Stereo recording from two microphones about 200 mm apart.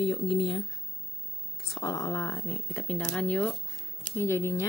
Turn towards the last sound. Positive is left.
turn(degrees=15)  # may be behind; listen again after turning